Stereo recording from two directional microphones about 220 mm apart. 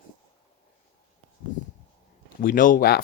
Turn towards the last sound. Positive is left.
turn(degrees=40)  # may be behind; listen again after turning